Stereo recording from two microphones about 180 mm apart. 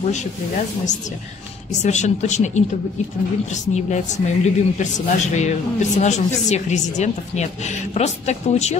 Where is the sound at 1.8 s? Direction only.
40° left (ahead or behind).